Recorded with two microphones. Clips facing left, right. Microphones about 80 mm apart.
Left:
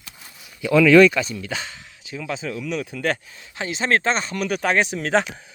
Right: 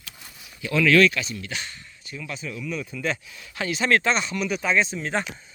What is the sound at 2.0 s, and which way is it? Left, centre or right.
Speech, left.